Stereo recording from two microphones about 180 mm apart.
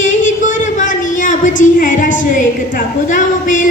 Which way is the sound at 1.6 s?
45° left (ahead or behind).